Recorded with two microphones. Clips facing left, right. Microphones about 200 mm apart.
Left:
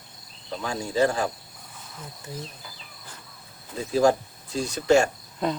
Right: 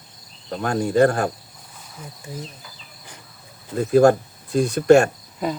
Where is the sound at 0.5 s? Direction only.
55° right (ahead or behind).